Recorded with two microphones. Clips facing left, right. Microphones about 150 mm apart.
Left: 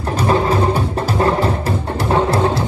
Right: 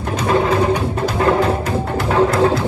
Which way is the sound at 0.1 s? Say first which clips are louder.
Even; 35° left (ahead or behind).